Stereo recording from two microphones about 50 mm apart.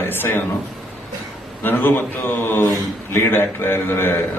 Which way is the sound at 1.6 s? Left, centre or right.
Left.